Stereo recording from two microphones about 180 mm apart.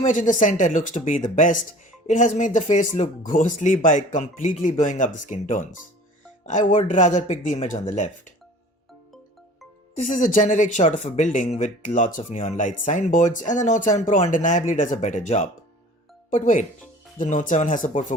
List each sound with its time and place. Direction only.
0.0 s speech: 45° left (ahead or behind)
9.9 s speech: 45° left (ahead or behind)